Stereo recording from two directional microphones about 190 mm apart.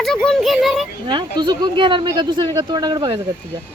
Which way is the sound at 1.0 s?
25° right (ahead or behind).